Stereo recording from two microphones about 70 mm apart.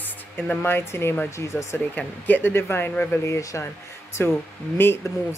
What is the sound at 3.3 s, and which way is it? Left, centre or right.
Speech, left.